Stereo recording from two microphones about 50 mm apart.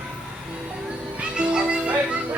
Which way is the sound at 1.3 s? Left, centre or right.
Centre.